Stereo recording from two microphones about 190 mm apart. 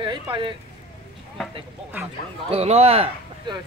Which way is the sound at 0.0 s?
25° right (ahead or behind).